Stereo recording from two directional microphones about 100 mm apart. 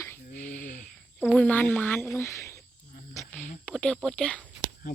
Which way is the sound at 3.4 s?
10° left (ahead or behind).